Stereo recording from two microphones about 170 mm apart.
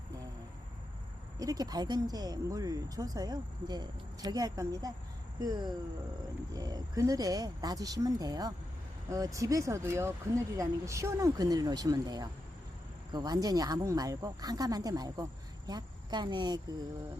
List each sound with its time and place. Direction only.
1.4 s speech: 20° right (ahead or behind)
6.5 s speech: 20° right (ahead or behind)